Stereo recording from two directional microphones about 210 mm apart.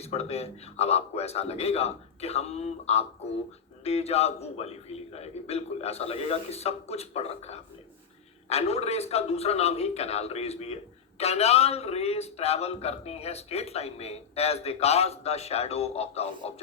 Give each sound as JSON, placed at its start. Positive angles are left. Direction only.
{"t": 0.0, "sound": "a man's voice", "side_deg": 30}